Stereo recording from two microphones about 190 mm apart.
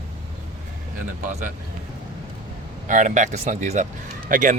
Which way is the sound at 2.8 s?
40° right (ahead or behind).